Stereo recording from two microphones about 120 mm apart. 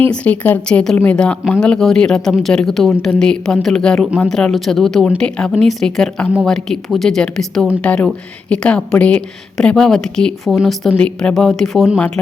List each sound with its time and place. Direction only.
0.1 s a woman's voice: 15° left (ahead or behind)